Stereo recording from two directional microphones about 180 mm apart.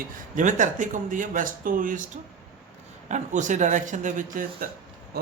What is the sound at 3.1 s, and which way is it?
A man's voice, 40° right (ahead or behind).